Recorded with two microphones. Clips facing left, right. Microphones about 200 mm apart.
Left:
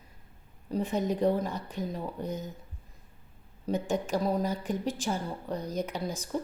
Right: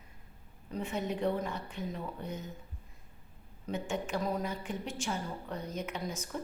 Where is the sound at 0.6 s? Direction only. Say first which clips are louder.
Left 6 dB; 35° left (ahead or behind).